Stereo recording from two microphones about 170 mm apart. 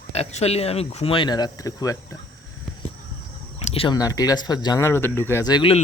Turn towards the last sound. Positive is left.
turn(degrees=30)  # may be behind; listen again after turning